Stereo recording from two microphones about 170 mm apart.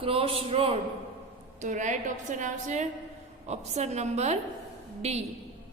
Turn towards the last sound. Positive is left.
turn(degrees=-40)  # may be behind; listen again after turning